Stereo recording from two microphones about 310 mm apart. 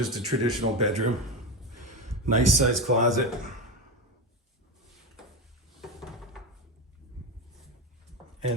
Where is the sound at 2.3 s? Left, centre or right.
Right.